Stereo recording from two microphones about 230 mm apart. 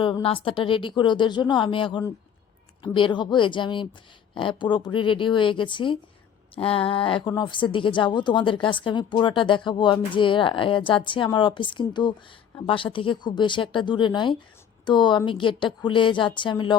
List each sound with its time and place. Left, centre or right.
0.0 s speech: left